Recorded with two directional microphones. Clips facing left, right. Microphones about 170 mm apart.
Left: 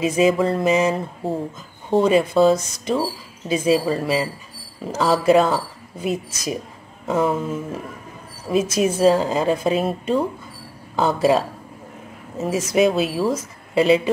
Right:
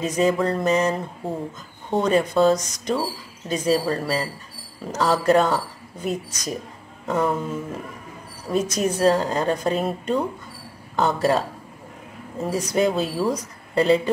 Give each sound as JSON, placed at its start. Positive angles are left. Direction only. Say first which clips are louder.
{"t": 0.0, "sound": "a woman's voice", "louder": "left 3 dB", "side_deg": 10}
{"t": 2.5, "sound": "speech", "louder": "left 2 dB", "side_deg": 30}
{"t": 2.8, "sound": "a woman's voice", "louder": "left 2 dB", "side_deg": 10}